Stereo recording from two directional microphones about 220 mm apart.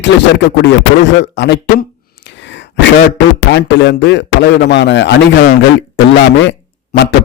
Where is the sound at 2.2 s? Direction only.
55° left (ahead or behind).